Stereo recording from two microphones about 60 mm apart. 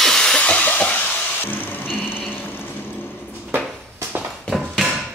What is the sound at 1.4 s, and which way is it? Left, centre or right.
Music, left.